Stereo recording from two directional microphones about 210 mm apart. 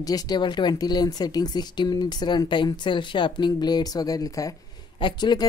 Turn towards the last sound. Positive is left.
turn(degrees=20)  # may be behind; listen again after turning